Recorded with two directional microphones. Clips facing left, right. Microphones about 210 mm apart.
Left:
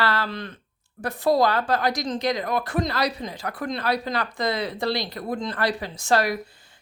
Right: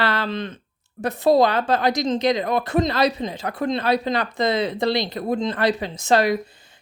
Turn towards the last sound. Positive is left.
turn(degrees=-20)  # may be behind; listen again after turning